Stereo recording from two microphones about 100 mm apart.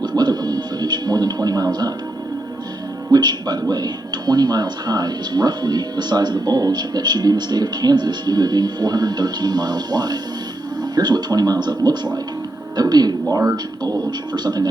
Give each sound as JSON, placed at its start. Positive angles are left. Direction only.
{"t": 0.2, "sound": "television", "side_deg": -45}
{"t": 3.1, "sound": "speech", "side_deg": -45}